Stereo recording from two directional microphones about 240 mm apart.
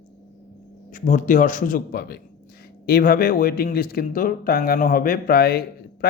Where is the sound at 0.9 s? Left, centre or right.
Left.